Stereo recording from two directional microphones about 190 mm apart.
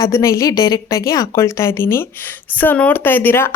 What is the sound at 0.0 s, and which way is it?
A woman's voice, 15° left (ahead or behind).